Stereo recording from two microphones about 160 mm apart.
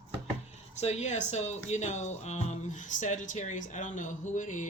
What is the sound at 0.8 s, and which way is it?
Speech, 45° left (ahead or behind).